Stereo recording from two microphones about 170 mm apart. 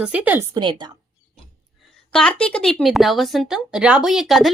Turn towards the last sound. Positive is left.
turn(degrees=0)  # may be behind; listen again after turning